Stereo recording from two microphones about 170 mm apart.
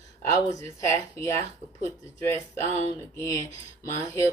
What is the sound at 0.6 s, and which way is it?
Speech, 20° left (ahead or behind).